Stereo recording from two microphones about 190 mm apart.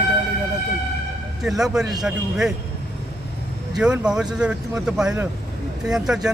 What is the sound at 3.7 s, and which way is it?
Speech, 5° right (ahead or behind).